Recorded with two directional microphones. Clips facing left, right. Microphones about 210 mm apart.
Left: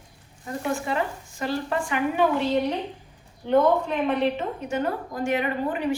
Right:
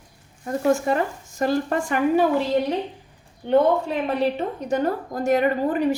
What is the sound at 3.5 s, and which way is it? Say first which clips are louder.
A woman's voice: right 2 dB; 35° right (ahead or behind).